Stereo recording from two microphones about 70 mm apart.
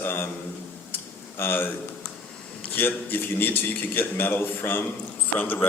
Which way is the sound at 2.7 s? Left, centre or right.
Left.